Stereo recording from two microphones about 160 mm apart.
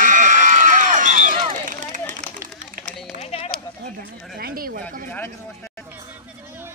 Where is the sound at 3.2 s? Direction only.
40° left (ahead or behind).